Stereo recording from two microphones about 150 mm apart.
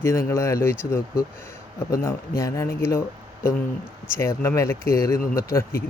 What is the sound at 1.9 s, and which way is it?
Speech, 20° left (ahead or behind).